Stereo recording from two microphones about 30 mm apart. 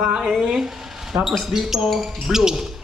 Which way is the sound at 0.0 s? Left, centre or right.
Right.